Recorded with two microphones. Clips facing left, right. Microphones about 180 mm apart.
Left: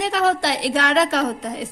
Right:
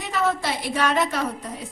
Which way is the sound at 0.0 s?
75° left (ahead or behind).